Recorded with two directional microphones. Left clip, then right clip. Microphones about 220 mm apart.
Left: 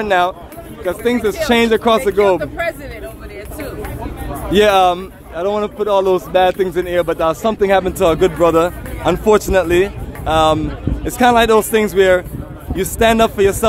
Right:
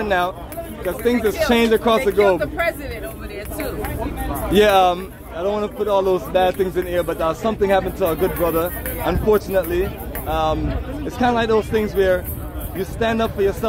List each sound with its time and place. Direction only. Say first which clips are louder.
0.0 s speech: left 5 dB; 35° left (ahead or behind)
2.4 s speech: left 1 dB; 10° left (ahead or behind)
4.5 s speech: left 3 dB; 25° left (ahead or behind)
5.4 s speech: left 4 dB; 35° left (ahead or behind)